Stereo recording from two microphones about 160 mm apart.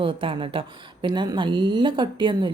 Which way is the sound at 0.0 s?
35° right (ahead or behind).